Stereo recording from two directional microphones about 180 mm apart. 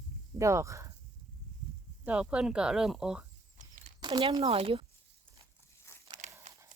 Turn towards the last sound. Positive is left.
turn(degrees=15)  # may be behind; listen again after turning